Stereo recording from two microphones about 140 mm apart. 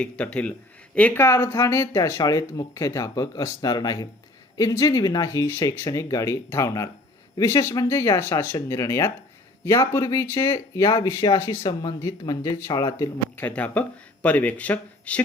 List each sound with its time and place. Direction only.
0.0 s speech: 10° left (ahead or behind)
13.3 s speech: 10° left (ahead or behind)